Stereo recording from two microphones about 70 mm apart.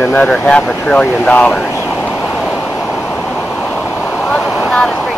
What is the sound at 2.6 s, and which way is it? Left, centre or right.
Waves, centre.